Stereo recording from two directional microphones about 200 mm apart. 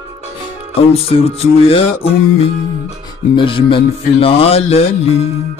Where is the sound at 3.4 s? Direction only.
25° left (ahead or behind).